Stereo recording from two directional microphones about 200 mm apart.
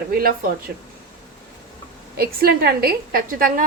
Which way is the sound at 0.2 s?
45° right (ahead or behind).